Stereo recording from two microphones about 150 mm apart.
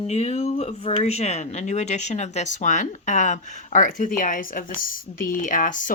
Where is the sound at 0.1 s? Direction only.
45° left (ahead or behind).